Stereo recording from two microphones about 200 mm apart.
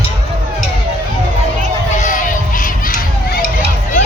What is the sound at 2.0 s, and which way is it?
Crowd, 40° left (ahead or behind).